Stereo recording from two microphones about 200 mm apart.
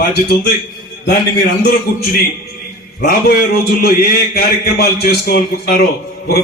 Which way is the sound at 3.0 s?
50° left (ahead or behind).